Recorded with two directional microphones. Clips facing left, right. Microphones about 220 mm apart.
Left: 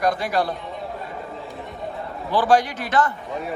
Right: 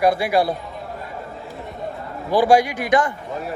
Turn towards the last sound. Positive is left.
turn(degrees=-15)  # may be behind; listen again after turning